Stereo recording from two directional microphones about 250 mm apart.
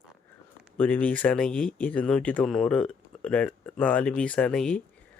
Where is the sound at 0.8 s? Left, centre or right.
Centre.